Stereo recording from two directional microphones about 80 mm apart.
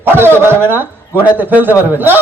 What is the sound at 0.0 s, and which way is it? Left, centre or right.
A man's voice, right.